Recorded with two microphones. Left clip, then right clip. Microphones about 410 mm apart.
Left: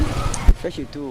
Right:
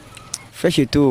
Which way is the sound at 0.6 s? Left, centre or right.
Right.